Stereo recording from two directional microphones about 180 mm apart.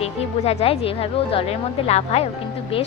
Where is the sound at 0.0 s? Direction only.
35° left (ahead or behind).